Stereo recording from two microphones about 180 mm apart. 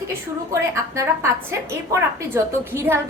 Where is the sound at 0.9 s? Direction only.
15° right (ahead or behind).